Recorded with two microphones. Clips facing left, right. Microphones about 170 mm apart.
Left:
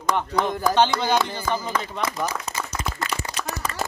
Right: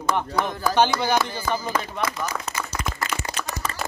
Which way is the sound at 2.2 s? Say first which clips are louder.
Left 1 dB; 35° left (ahead or behind).